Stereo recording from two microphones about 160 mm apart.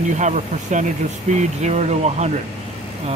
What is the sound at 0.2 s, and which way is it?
Speech, 50° right (ahead or behind).